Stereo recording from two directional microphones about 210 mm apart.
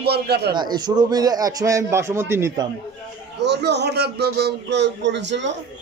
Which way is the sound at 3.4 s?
55° right (ahead or behind).